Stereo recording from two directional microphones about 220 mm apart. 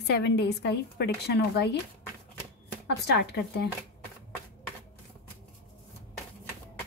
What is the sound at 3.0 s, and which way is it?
Speech, 50° left (ahead or behind).